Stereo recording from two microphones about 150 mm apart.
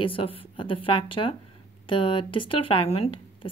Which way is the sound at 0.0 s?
35° left (ahead or behind).